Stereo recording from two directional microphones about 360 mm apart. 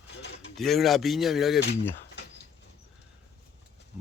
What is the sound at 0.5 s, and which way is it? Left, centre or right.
Speech, centre.